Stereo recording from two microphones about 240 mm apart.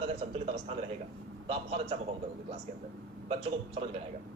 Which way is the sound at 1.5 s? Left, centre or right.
Right.